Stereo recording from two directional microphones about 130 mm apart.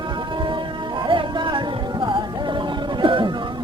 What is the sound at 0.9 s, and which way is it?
Music, 40° right (ahead or behind).